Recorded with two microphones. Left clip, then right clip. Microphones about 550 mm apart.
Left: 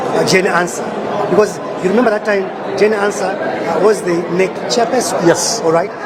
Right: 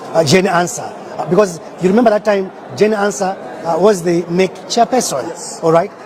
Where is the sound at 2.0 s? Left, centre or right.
Right.